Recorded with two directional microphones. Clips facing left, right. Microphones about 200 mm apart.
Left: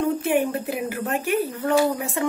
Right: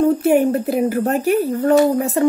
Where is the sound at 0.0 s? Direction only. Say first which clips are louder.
Right 7 dB; 40° right (ahead or behind).